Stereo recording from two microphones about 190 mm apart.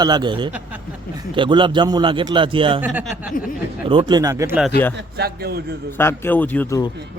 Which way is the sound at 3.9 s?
25° right (ahead or behind).